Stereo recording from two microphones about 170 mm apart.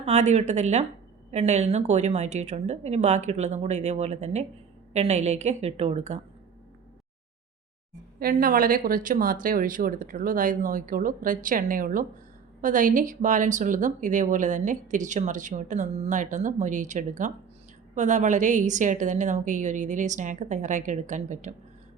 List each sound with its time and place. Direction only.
0.0 s a woman's voice: 40° right (ahead or behind)
8.2 s speech: 55° right (ahead or behind)